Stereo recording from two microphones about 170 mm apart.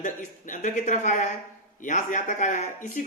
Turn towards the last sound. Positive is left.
turn(degrees=50)  # may be behind; listen again after turning